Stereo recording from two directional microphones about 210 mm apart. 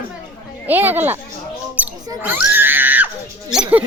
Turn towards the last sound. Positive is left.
turn(degrees=-5)  # may be behind; listen again after turning